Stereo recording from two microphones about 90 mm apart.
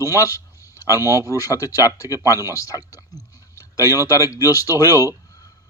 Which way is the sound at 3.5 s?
40° left (ahead or behind).